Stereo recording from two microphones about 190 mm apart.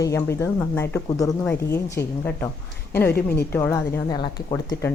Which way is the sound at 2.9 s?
10° left (ahead or behind).